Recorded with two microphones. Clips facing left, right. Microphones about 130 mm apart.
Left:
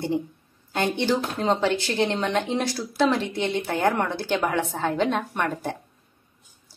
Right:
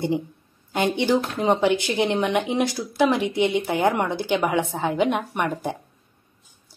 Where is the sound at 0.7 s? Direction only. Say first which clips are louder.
Right 3 dB; 15° right (ahead or behind).